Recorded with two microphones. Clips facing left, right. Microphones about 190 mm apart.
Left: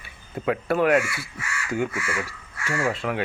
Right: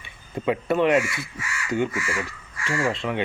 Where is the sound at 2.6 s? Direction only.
5° left (ahead or behind).